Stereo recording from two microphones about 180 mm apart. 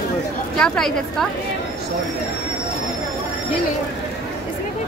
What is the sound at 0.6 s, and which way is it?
Speech, 5° left (ahead or behind).